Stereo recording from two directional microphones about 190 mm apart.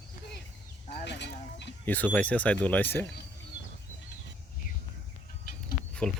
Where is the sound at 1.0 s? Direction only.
65° left (ahead or behind).